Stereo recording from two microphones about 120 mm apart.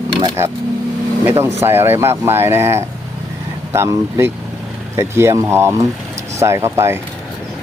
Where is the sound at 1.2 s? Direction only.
20° right (ahead or behind).